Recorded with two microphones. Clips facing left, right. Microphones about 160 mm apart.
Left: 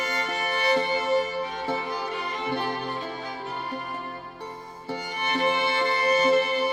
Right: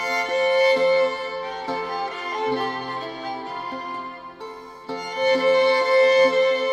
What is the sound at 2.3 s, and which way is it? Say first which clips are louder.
Music: right 6 dB; 45° right (ahead or behind).